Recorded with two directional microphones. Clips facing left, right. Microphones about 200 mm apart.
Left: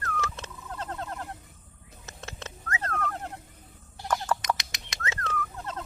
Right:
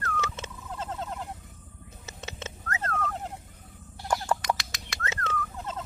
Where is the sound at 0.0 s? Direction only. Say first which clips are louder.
Right 1 dB; centre (ahead or behind).